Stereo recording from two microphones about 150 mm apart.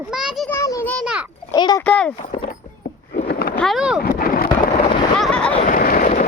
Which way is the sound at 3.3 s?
90° left.